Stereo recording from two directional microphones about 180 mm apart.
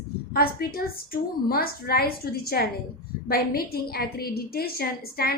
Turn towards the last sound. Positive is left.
turn(degrees=60)  # may be behind; listen again after turning